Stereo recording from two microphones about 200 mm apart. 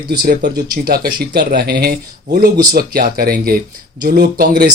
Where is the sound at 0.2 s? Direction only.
50° right (ahead or behind).